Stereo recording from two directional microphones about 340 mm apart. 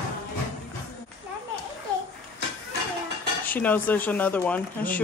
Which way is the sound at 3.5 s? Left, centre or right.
Centre.